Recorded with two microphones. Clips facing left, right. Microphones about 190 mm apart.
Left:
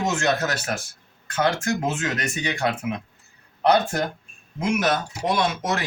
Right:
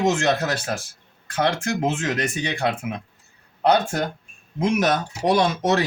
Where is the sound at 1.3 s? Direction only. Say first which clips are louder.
Even; 30° right (ahead or behind).